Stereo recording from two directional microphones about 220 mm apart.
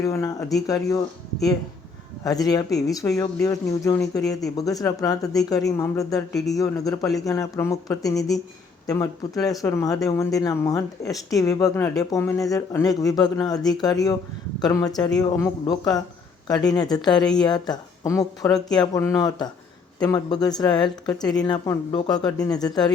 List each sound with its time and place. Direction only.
0.0 s speech: 15° left (ahead or behind)
2.2 s speech: 15° left (ahead or behind)